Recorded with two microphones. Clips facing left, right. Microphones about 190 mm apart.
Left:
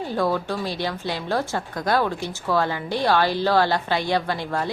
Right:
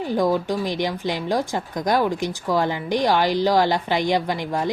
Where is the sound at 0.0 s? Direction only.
15° right (ahead or behind).